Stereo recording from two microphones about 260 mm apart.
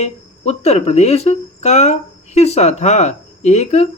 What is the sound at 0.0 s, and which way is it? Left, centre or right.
Speech, left.